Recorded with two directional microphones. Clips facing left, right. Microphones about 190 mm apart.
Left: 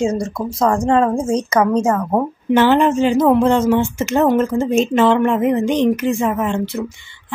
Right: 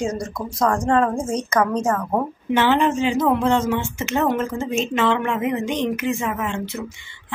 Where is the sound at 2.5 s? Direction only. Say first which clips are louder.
Left 5 dB; 45° left (ahead or behind).